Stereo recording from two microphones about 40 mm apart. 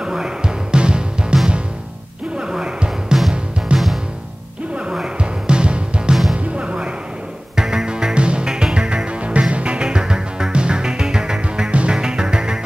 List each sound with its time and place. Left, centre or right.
0.0 s music: centre
2.3 s a sound: centre
3.1 s music: right
3.7 s music: centre
5.5 s music: right
7.5 s music: centre
11.7 s music: right
12.0 s music: centre